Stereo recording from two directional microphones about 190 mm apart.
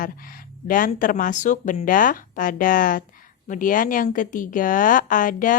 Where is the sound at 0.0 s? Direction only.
45° left (ahead or behind).